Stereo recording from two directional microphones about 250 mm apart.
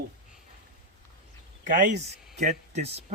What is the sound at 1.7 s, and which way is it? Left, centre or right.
Speech, right.